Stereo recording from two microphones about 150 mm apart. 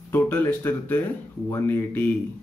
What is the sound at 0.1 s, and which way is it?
Speech, 15° left (ahead or behind).